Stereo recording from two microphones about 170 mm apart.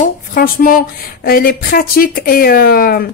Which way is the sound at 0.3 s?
60° left (ahead or behind).